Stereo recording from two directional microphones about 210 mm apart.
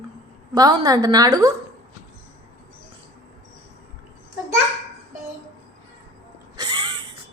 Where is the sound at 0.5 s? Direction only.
20° right (ahead or behind).